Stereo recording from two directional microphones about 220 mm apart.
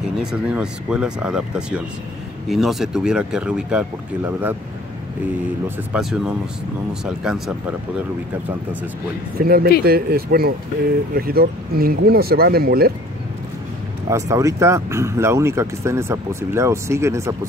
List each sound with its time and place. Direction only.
0.2 s speech: 5° right (ahead or behind)
5.9 s speech: centre (ahead or behind)
9.4 s speech: 45° right (ahead or behind)
14.0 s speech: 15° right (ahead or behind)